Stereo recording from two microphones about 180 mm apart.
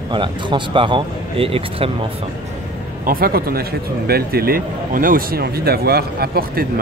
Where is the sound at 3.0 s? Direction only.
55° right (ahead or behind).